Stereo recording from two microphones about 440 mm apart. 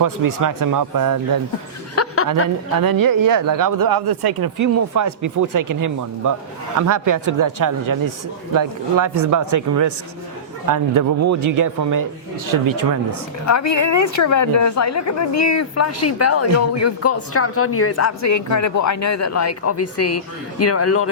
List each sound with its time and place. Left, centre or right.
0.0 s speech: right
2.0 s chuckle: left
2.8 s speech: right
13.4 s a woman's voice: left